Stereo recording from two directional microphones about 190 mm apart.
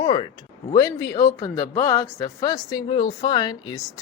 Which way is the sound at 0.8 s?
20° left (ahead or behind).